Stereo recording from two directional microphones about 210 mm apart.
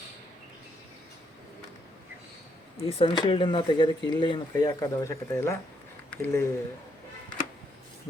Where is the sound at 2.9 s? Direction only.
25° left (ahead or behind).